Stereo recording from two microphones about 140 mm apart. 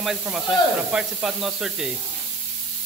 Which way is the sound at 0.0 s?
5° right (ahead or behind).